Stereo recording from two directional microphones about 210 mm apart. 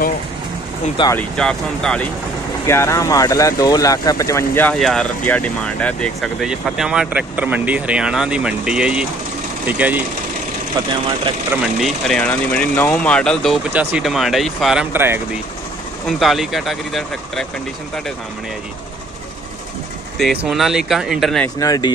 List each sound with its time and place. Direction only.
1.1 s speech: 5° left (ahead or behind)
11.6 s speech: centre (ahead or behind)
20.2 s speech: centre (ahead or behind)
21.5 s speech: 20° left (ahead or behind)